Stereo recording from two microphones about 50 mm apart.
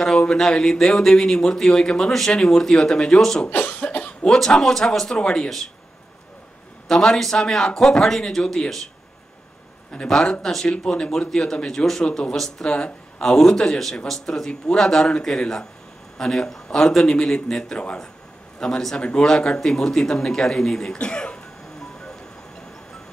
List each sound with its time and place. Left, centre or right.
0.3 s speech: centre
3.4 s cough: left
4.2 s speech: centre
6.9 s speech: centre
10.0 s a man's voice: centre
21.0 s cough: centre